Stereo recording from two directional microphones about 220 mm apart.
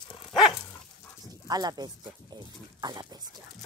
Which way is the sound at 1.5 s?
15° right (ahead or behind).